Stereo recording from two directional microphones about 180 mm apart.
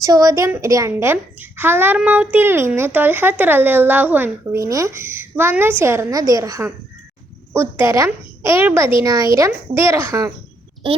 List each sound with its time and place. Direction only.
0.0 s a woman's voice: 20° right (ahead or behind)